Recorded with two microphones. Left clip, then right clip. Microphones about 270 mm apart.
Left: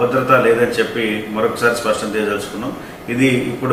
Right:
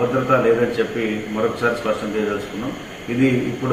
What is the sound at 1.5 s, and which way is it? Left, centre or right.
Speech, centre.